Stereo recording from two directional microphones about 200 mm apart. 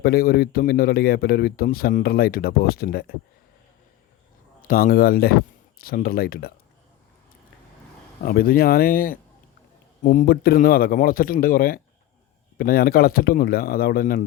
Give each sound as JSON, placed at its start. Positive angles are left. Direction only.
{"t": 0.0, "sound": "speech", "side_deg": 50}
{"t": 4.6, "sound": "speech", "side_deg": 45}
{"t": 8.2, "sound": "speech", "side_deg": 45}